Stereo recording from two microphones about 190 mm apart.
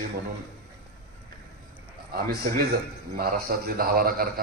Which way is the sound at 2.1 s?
50° right (ahead or behind).